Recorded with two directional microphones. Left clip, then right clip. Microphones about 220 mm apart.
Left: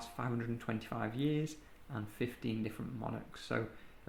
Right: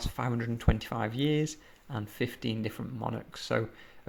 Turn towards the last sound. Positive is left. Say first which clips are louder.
# right 7 dB
turn(degrees=-40)  # may be behind; listen again after turning